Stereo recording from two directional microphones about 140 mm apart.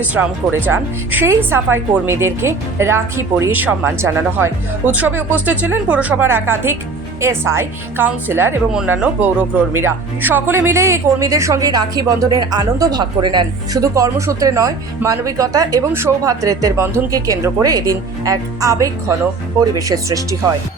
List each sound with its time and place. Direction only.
0.1 s speech: 10° right (ahead or behind)